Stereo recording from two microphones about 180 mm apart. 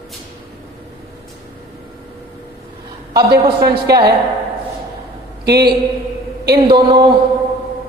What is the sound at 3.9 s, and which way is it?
Speech, 65° right (ahead or behind).